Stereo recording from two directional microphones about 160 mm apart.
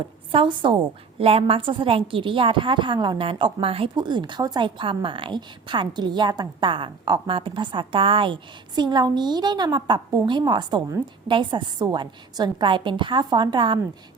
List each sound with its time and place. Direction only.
0.3 s a woman's voice: 30° right (ahead or behind)